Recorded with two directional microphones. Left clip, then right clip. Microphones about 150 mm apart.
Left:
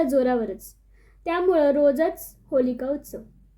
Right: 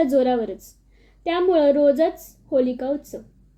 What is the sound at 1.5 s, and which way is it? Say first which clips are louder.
A woman's voice: right 3 dB; 15° right (ahead or behind).